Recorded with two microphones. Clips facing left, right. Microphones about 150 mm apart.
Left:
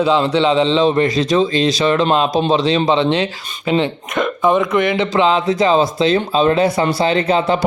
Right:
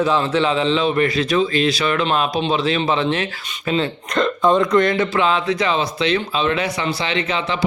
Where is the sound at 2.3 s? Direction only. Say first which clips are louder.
Left 4 dB; 40° left (ahead or behind).